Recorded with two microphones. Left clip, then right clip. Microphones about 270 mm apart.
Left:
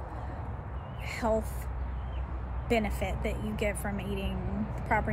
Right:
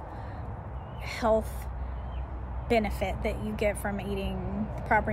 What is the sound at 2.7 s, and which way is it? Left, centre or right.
Speech, centre.